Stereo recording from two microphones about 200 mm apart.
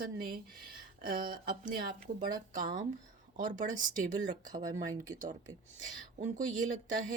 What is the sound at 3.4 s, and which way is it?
Speech, 40° right (ahead or behind).